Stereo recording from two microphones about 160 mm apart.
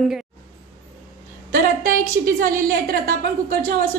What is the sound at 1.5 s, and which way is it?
A woman's voice, 60° right (ahead or behind).